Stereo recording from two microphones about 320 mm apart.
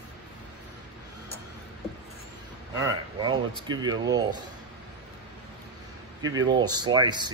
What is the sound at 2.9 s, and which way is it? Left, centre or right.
Speech, centre.